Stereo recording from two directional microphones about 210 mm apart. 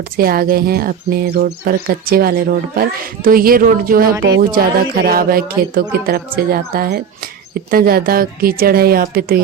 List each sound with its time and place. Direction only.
0.2 s speech: 45° right (ahead or behind)